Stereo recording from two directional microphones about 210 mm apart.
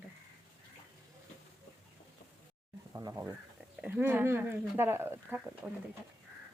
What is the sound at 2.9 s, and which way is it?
Speech, 15° right (ahead or behind).